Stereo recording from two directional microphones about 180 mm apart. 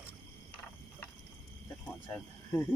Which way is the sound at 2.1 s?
15° left (ahead or behind).